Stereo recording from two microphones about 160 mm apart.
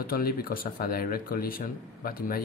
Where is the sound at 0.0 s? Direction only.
65° left (ahead or behind).